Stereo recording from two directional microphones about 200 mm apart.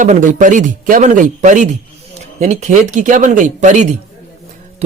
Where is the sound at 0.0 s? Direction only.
40° right (ahead or behind).